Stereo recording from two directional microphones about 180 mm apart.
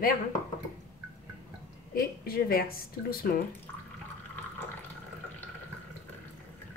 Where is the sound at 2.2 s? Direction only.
55° left (ahead or behind).